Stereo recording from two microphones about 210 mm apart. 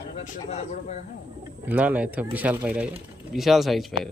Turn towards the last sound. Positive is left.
turn(degrees=0)  # may be behind; listen again after turning